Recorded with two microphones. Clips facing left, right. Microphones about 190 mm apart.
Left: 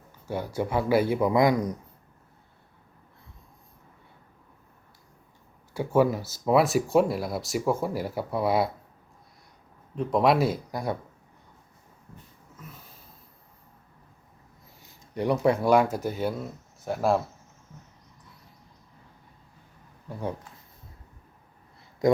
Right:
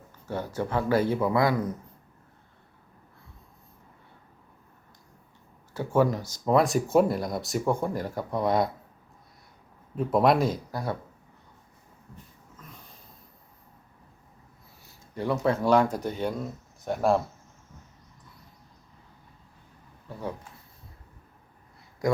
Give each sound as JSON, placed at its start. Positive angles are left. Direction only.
{"t": 0.3, "sound": "speech", "side_deg": 10}
{"t": 5.7, "sound": "speech", "side_deg": 10}
{"t": 9.9, "sound": "speech", "side_deg": -5}
{"t": 12.5, "sound": "wheeze", "side_deg": 5}
{"t": 15.1, "sound": "speech", "side_deg": 15}
{"t": 22.0, "sound": "speech", "side_deg": 20}